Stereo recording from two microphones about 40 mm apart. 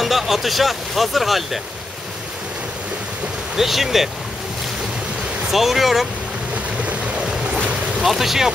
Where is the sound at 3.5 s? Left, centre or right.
Centre.